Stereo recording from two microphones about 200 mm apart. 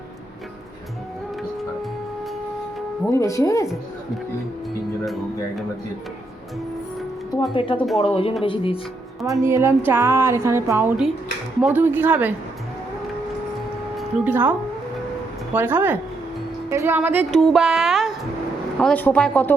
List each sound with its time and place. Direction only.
3.1 s speech: 15° left (ahead or behind)
5.0 s speech: centre (ahead or behind)
7.5 s speech: 25° left (ahead or behind)
7.8 s speech: centre (ahead or behind)
8.1 s speech: 30° left (ahead or behind)
9.4 s speech: 15° right (ahead or behind)
13.9 s speech: 10° right (ahead or behind)
15.5 s a woman's voice: 10° right (ahead or behind); by 19.5 s 10° left (ahead or behind)